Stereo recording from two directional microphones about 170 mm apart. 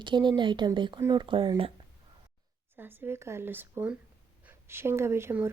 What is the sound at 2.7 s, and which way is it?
A woman's voice, 10° right (ahead or behind).